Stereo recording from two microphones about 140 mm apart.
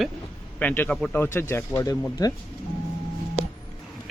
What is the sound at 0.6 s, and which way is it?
Speech, 10° left (ahead or behind).